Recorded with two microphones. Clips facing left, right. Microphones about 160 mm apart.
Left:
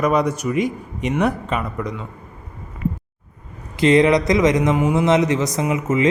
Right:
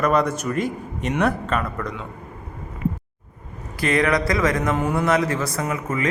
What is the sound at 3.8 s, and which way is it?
A man's voice, 20° left (ahead or behind).